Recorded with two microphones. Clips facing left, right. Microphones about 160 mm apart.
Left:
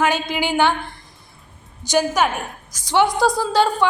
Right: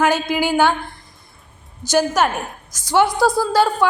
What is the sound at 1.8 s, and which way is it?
A woman's voice, 15° left (ahead or behind).